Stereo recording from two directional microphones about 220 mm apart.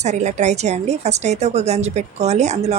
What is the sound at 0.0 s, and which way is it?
A woman's voice, 30° right (ahead or behind).